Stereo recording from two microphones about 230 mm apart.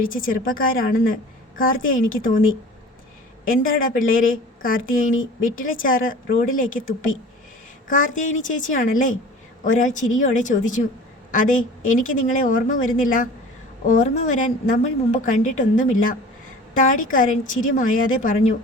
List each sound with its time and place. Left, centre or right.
0.0 s a woman's voice: left
3.4 s a man's voice: left